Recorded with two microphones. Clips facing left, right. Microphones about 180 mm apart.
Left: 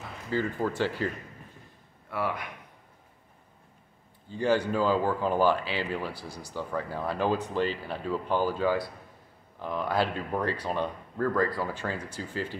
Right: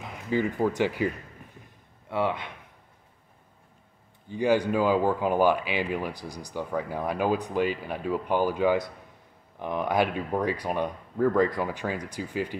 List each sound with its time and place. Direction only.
0.0 s speech: 15° right (ahead or behind)
4.3 s speech: 15° right (ahead or behind)